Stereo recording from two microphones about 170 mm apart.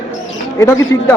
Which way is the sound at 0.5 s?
20° left (ahead or behind).